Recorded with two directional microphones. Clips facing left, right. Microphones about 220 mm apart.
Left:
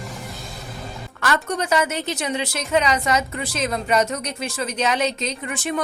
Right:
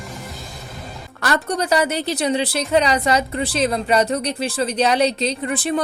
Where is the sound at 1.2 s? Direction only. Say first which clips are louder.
Right 2 dB; 35° right (ahead or behind).